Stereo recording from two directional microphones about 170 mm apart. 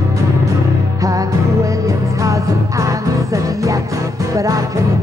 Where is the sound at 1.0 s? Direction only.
20° right (ahead or behind).